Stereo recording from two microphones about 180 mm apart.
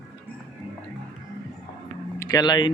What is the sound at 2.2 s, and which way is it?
Speech, 20° left (ahead or behind).